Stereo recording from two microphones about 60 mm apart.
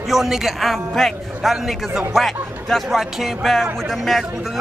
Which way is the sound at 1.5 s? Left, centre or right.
Centre.